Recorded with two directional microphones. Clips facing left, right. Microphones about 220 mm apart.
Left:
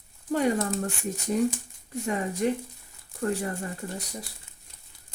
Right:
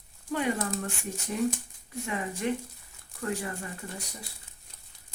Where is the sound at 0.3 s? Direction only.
35° left (ahead or behind).